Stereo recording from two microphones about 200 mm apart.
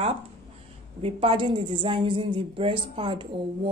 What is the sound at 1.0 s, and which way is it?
Speech, 25° right (ahead or behind).